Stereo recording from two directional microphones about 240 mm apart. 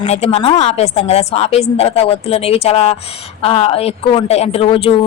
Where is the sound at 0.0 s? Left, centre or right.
Left.